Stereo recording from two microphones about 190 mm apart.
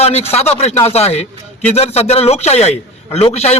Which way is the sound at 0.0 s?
35° left (ahead or behind).